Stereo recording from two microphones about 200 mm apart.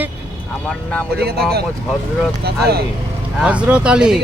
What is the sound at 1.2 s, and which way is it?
Speech, 55° right (ahead or behind).